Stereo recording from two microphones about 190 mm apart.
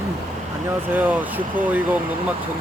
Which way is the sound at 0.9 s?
10° right (ahead or behind).